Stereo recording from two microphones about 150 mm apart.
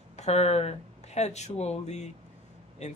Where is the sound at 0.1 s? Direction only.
45° left (ahead or behind).